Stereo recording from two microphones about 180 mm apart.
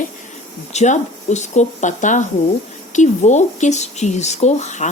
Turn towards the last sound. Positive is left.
turn(degrees=40)  # may be behind; listen again after turning